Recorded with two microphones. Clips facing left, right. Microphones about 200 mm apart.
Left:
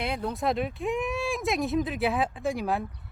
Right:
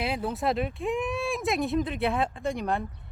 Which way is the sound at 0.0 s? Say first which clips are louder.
Right 1 dB; 5° right (ahead or behind).